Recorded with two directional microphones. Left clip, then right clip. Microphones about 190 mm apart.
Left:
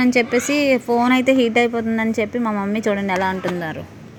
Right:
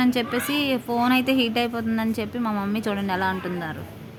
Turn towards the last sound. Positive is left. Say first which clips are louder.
# left 5 dB
turn(degrees=15)  # may be behind; listen again after turning